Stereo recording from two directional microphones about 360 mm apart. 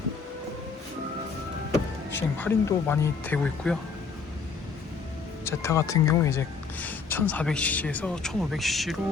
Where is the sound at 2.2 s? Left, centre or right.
Centre.